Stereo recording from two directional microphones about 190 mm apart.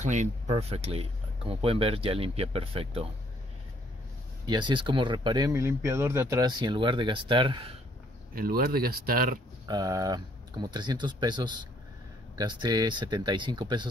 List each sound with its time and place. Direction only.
0.0 s speech: 40° right (ahead or behind)
4.5 s speech: 25° right (ahead or behind)
8.4 s speech: 50° right (ahead or behind)
9.7 s speech: 20° right (ahead or behind)